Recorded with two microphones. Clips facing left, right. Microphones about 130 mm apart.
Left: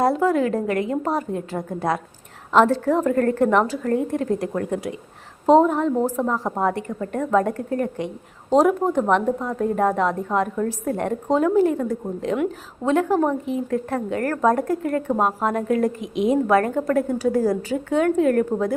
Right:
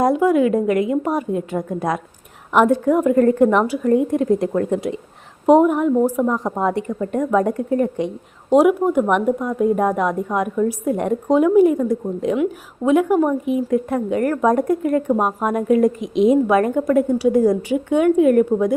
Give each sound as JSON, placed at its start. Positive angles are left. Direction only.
{"t": 0.0, "sound": "a woman's voice", "side_deg": -15}
{"t": 2.5, "sound": "a woman's voice", "side_deg": -15}